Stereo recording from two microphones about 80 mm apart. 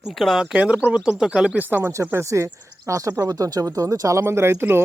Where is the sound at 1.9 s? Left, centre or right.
Right.